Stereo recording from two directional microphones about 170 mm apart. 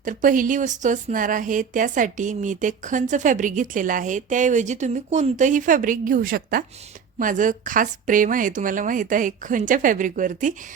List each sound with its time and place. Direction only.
0.0 s speech: 50° right (ahead or behind)